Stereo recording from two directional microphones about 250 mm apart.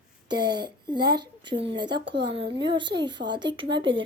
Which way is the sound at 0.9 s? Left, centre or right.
Centre.